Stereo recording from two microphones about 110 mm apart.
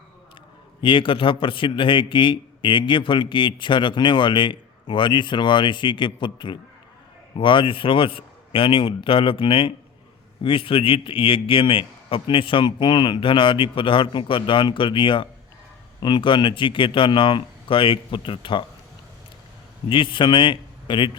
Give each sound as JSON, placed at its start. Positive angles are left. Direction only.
{"t": 0.8, "sound": "a man's voice", "side_deg": 50}
{"t": 19.9, "sound": "a man's voice", "side_deg": 50}